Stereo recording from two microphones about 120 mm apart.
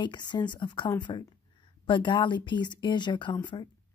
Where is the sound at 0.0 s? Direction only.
40° left (ahead or behind).